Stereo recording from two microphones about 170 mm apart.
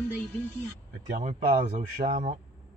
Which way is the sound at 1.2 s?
45° right (ahead or behind).